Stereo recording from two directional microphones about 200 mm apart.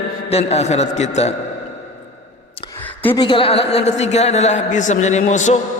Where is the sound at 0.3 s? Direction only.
30° left (ahead or behind).